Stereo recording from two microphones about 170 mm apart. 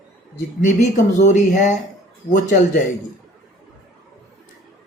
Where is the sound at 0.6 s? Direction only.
45° left (ahead or behind).